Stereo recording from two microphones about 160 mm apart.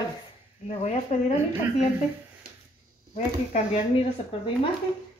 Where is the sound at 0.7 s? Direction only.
45° left (ahead or behind).